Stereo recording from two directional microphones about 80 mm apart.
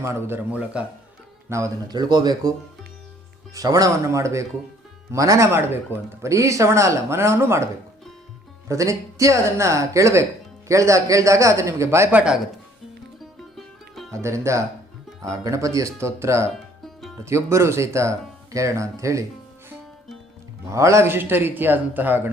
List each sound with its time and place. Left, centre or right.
0.0 s speech: right
0.5 s speech: centre
1.5 s speech: right
1.9 s speech: right
3.5 s speech: right
5.5 s a man's voice: right
6.2 s speech: right
12.1 s speech: centre
14.1 s speech: right
20.7 s a man's voice: right